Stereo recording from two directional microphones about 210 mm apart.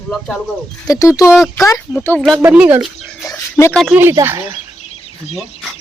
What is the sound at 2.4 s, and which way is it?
Speech, 5° right (ahead or behind).